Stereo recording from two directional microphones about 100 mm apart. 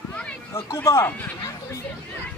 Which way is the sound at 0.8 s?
25° left (ahead or behind).